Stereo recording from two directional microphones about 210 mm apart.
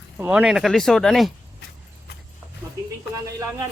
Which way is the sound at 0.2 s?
5° right (ahead or behind).